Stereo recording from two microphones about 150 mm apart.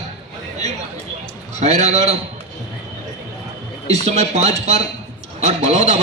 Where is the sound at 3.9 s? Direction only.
45° right (ahead or behind).